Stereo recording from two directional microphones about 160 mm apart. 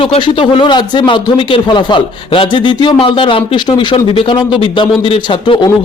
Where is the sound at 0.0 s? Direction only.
35° left (ahead or behind).